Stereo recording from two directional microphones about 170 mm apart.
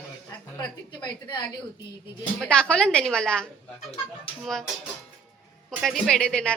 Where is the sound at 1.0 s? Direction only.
25° left (ahead or behind).